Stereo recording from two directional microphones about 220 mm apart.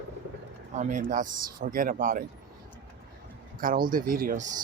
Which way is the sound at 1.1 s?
40° right (ahead or behind).